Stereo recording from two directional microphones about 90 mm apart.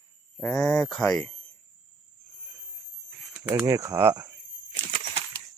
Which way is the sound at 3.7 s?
35° right (ahead or behind).